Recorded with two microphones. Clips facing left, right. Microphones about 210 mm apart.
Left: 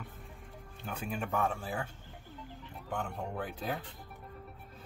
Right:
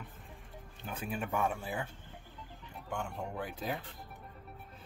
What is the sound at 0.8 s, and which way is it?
Speech, 5° right (ahead or behind).